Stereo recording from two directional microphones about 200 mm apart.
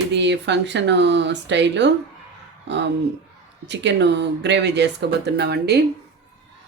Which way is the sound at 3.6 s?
60° right (ahead or behind).